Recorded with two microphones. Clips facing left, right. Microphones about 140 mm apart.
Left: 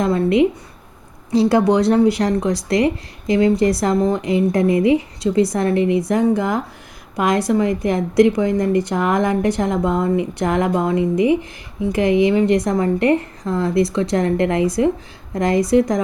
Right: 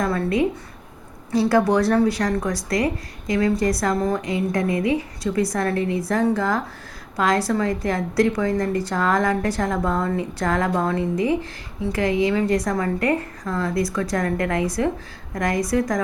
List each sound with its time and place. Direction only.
0.0 s a woman's voice: 25° left (ahead or behind)